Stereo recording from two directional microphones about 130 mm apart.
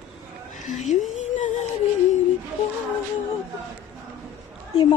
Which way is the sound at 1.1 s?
65° left (ahead or behind).